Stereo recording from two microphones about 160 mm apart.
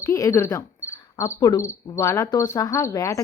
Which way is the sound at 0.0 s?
20° left (ahead or behind).